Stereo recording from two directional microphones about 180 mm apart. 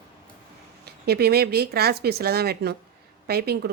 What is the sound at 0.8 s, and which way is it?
Speech, 60° right (ahead or behind).